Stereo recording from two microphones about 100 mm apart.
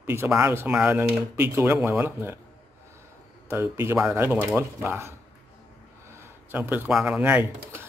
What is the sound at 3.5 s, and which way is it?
Speech, 25° right (ahead or behind).